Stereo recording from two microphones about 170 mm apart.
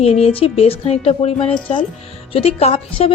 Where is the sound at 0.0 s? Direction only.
35° left (ahead or behind).